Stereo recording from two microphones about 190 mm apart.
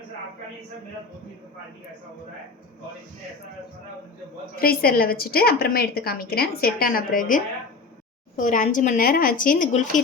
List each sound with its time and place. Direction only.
4.6 s a woman's voice: 50° left (ahead or behind)